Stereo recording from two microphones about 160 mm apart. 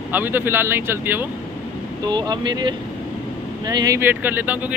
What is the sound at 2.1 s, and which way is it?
Speech, 25° right (ahead or behind).